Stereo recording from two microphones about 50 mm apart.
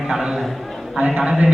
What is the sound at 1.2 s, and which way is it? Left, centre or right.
Speech, centre.